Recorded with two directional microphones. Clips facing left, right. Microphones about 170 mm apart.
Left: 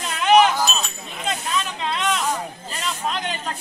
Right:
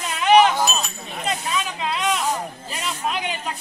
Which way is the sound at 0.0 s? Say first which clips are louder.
Right 1 dB; centre (ahead or behind).